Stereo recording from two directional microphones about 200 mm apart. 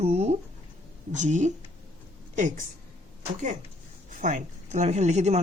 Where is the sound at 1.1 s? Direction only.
35° right (ahead or behind).